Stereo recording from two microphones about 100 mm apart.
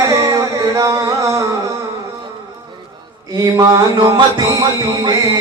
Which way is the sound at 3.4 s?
35° right (ahead or behind).